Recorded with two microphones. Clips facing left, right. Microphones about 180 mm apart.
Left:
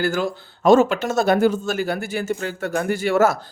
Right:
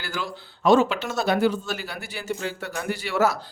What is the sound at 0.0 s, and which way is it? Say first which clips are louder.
Speech: left 10 dB; 45° left (ahead or behind).